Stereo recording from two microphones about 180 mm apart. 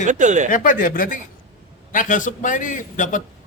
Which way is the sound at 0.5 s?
50° left (ahead or behind).